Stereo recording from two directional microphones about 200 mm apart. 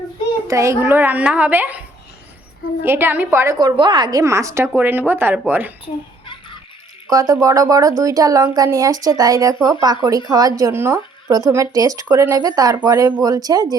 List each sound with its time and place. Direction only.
0.4 s speech: 15° right (ahead or behind)
2.8 s speech: 10° right (ahead or behind)
7.1 s speech: 15° right (ahead or behind)